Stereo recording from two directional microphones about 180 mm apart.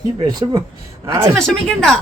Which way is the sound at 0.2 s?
25° right (ahead or behind).